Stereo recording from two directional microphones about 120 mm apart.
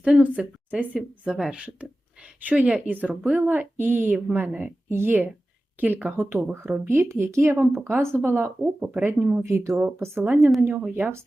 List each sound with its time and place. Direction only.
0.0 s speech: 10° right (ahead or behind)